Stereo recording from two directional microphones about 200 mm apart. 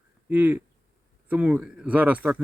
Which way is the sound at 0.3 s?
10° right (ahead or behind).